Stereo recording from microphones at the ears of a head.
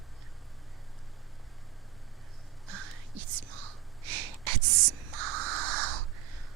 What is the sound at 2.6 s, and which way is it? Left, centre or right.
Whispering, right.